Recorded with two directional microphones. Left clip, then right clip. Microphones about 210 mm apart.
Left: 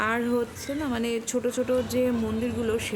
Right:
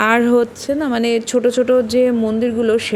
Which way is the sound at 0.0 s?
30° right (ahead or behind).